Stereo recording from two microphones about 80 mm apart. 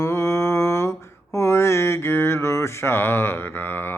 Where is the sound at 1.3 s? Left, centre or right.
Left.